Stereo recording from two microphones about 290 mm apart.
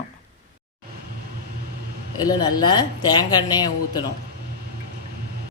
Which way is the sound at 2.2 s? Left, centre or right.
Centre.